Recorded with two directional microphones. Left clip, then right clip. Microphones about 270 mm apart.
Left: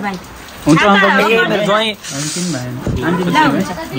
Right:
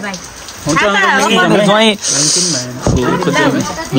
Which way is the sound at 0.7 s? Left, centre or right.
Right.